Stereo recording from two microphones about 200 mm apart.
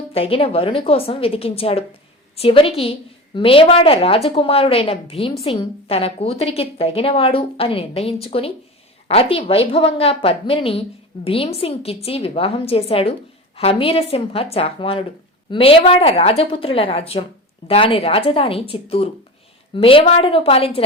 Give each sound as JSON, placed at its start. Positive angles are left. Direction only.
{"t": 0.1, "sound": "a woman's voice", "side_deg": 30}